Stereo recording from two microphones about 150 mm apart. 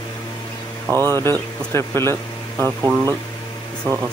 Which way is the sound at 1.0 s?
15° left (ahead or behind).